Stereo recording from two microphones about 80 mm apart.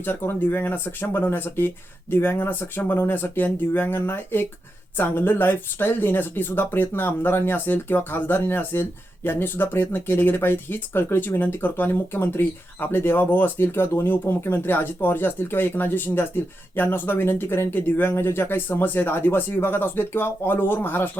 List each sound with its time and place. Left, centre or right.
0.0 s speech: left